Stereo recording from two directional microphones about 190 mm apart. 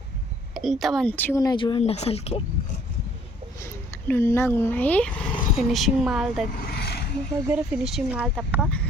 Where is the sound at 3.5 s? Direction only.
15° left (ahead or behind); by 6.4 s centre (ahead or behind).